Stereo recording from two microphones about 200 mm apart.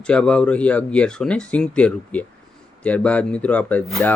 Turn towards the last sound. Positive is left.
turn(degrees=10)  # may be behind; listen again after turning